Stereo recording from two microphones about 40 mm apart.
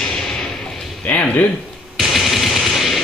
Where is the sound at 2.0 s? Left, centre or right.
Centre.